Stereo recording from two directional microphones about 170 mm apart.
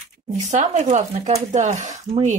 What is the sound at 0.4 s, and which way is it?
Speech, 40° right (ahead or behind).